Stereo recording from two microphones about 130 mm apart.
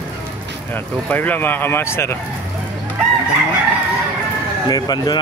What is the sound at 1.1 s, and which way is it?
Speech, 15° left (ahead or behind).